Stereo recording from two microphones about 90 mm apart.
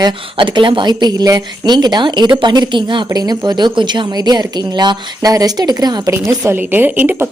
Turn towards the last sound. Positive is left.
turn(degrees=-20)  # may be behind; listen again after turning